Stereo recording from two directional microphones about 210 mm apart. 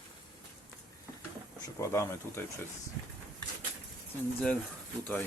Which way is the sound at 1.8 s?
15° left (ahead or behind).